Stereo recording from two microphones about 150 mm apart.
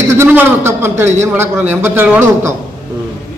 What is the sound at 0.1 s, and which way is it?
A man's voice, 15° right (ahead or behind).